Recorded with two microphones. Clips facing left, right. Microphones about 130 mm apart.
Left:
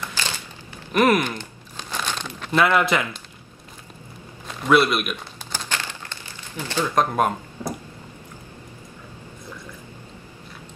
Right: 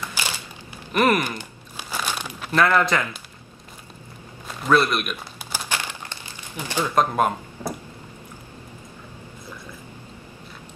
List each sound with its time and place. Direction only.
0.0 s a sound: 10° right (ahead or behind)
0.9 s a man's voice: centre (ahead or behind)
1.3 s crumpling: 10° right (ahead or behind)
2.5 s speech: 10° left (ahead or behind)
4.6 s a man's voice: 5° left (ahead or behind)
5.1 s crumpling: 10° right (ahead or behind)
7.0 s a man's voice: 5° right (ahead or behind)